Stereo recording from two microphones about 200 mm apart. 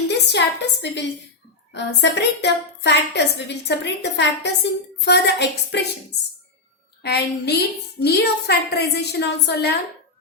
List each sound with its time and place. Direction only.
0.1 s a sound: 60° left (ahead or behind)
1.7 s a woman's voice: 60° left (ahead or behind)
7.0 s a woman's voice: 55° left (ahead or behind)